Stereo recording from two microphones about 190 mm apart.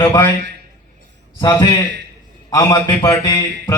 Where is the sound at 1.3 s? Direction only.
20° left (ahead or behind).